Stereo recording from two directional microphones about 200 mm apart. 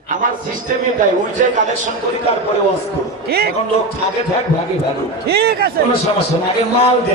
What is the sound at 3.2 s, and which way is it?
Speech, 50° right (ahead or behind).